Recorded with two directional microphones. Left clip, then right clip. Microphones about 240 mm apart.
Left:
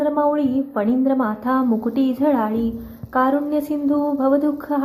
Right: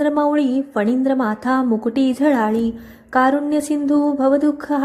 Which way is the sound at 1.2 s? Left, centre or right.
Right.